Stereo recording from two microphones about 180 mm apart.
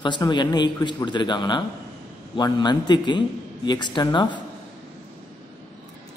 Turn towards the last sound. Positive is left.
turn(degrees=25)  # may be behind; listen again after turning